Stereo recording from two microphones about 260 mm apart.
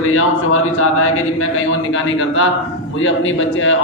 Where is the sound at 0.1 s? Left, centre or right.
Left.